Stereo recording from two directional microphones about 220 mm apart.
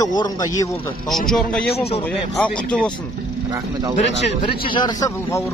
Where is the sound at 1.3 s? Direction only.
5° left (ahead or behind).